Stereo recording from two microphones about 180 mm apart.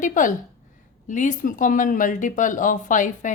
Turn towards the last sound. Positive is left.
turn(degrees=45)  # may be behind; listen again after turning